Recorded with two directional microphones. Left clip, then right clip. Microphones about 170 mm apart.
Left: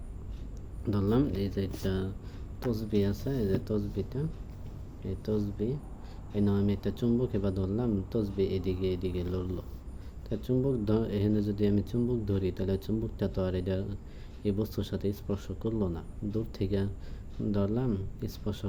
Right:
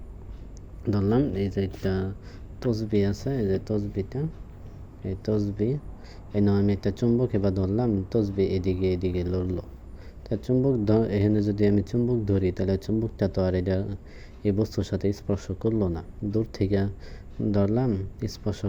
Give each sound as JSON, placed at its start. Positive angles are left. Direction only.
{"t": 0.9, "sound": "speech", "side_deg": -25}